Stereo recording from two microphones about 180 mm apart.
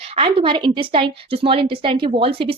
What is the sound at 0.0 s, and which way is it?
A woman's voice, 30° right (ahead or behind).